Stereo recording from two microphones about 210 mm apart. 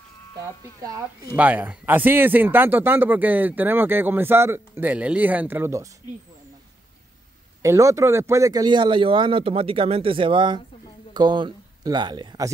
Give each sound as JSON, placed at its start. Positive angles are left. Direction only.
{"t": 1.3, "sound": "a man's voice", "side_deg": -5}
{"t": 7.6, "sound": "speech", "side_deg": -15}